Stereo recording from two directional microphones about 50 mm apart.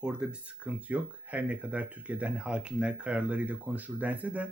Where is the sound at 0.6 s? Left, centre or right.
Right.